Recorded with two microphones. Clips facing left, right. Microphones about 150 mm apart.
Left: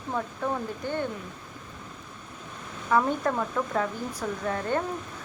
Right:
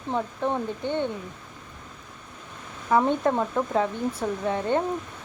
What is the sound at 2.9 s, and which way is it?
Speech, 25° right (ahead or behind).